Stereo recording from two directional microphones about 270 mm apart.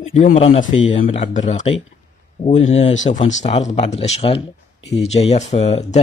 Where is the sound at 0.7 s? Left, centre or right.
Left.